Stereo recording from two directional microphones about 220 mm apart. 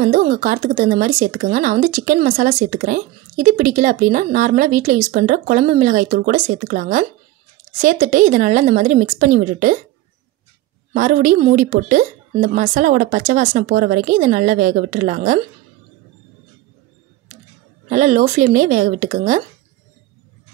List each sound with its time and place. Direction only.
0.0 s speech: 35° right (ahead or behind)
10.9 s speech: 35° right (ahead or behind)
17.8 s speech: 35° right (ahead or behind)